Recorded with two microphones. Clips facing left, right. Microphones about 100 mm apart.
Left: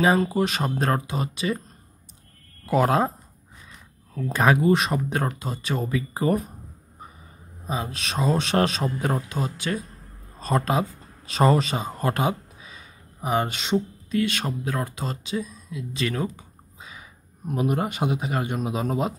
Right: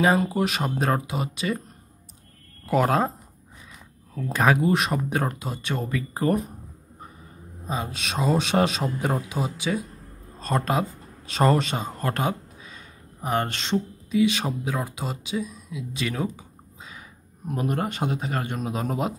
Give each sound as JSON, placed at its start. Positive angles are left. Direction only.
{"t": 0.0, "sound": "speech", "side_deg": 0}
{"t": 2.6, "sound": "speech", "side_deg": 0}
{"t": 4.1, "sound": "speech", "side_deg": 0}
{"t": 7.6, "sound": "speech", "side_deg": 0}
{"t": 14.1, "sound": "a man's voice", "side_deg": -15}